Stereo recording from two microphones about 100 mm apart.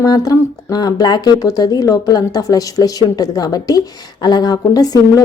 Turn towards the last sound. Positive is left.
turn(degrees=40)  # may be behind; listen again after turning